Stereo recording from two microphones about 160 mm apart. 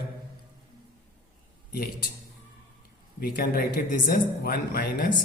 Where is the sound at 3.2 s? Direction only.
70° left (ahead or behind).